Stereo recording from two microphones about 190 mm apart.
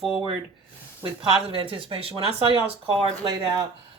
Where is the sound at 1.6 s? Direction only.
30° right (ahead or behind).